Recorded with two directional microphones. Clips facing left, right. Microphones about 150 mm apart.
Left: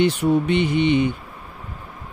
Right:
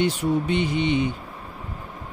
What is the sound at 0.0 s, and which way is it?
Speech, 70° left (ahead or behind).